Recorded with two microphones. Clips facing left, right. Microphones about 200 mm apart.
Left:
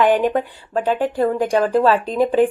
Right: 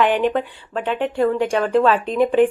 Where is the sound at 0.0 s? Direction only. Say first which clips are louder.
Left 2 dB; 40° left (ahead or behind).